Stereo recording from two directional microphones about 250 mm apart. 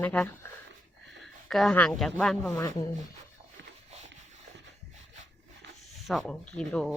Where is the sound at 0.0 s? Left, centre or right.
Centre.